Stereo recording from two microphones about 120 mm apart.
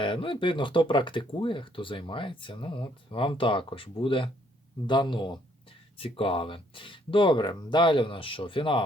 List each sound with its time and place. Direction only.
0.0 s a man's voice: 45° left (ahead or behind)